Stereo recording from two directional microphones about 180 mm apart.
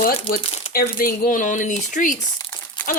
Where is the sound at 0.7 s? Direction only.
55° left (ahead or behind).